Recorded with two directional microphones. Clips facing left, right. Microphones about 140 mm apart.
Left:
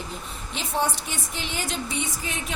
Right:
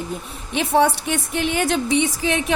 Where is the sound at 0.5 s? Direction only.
65° right (ahead or behind).